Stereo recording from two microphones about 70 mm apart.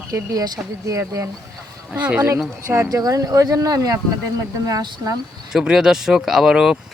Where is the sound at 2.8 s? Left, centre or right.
Right.